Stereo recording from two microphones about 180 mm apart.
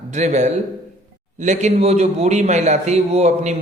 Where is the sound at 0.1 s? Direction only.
40° right (ahead or behind).